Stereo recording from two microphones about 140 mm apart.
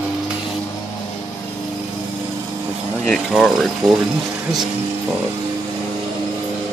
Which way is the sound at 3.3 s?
Centre (ahead or behind).